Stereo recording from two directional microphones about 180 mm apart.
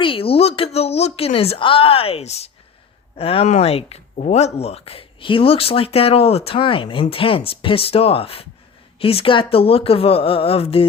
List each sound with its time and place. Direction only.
0.0 s speech: 30° left (ahead or behind)